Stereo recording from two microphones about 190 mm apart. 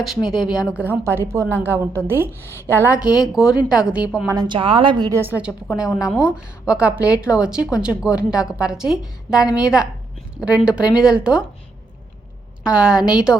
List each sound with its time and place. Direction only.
0.3 s a woman's voice: centre (ahead or behind)
4.4 s a woman's voice: 25° right (ahead or behind); by 11.4 s 5° right (ahead or behind)
12.6 s a woman's voice: 5° right (ahead or behind)